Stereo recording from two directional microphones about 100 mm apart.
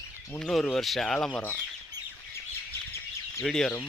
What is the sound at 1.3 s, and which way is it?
Speech, 20° left (ahead or behind).